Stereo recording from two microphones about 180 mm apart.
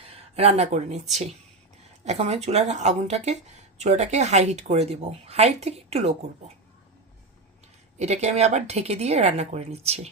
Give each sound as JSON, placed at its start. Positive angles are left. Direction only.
{"t": 0.1, "sound": "speech", "side_deg": -35}
{"t": 2.0, "sound": "speech", "side_deg": -35}
{"t": 7.9, "sound": "speech", "side_deg": -40}